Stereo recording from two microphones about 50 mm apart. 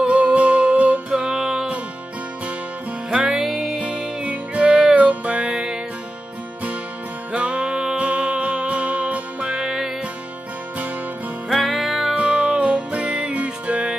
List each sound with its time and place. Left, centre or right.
0.0 s music: right
1.1 s music: centre
3.1 s music: centre
3.8 s music: right
7.3 s music: right
9.6 s music: centre
11.4 s music: centre
12.2 s music: right